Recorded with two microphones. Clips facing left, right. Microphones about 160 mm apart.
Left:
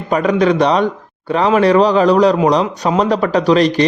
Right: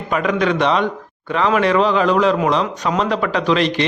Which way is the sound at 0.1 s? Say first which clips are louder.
Left 5 dB; 35° left (ahead or behind).